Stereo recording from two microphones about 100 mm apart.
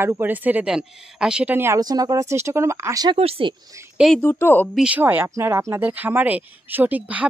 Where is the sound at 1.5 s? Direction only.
25° right (ahead or behind).